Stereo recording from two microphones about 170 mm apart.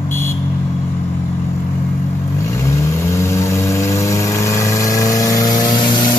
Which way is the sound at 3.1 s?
15° left (ahead or behind).